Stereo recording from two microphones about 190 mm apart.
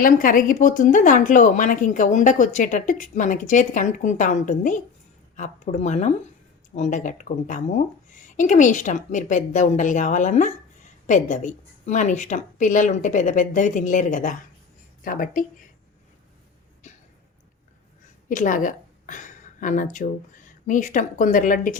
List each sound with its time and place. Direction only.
0.0 s a woman's voice: 45° left (ahead or behind)
18.3 s a woman's voice: 45° left (ahead or behind)